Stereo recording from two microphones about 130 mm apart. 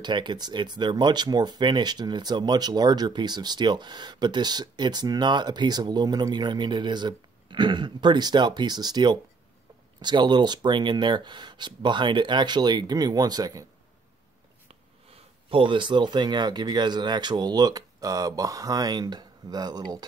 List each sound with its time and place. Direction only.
0.0 s speech: 35° right (ahead or behind)
15.5 s speech: 40° right (ahead or behind)